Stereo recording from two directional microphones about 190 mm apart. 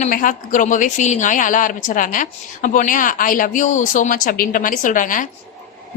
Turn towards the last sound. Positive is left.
turn(degrees=45)  # may be behind; listen again after turning